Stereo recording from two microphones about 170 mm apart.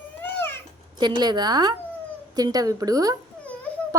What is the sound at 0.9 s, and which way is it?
A woman's voice, 25° right (ahead or behind).